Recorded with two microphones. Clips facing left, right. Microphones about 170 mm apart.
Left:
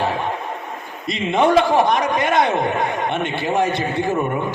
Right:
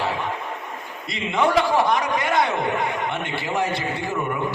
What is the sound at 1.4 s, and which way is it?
A man's voice, 20° left (ahead or behind).